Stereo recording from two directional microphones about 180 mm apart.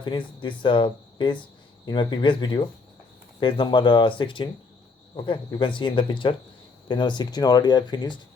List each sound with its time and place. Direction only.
0.0 s speech: 25° left (ahead or behind)